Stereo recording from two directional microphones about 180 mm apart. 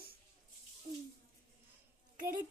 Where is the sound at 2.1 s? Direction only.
50° right (ahead or behind).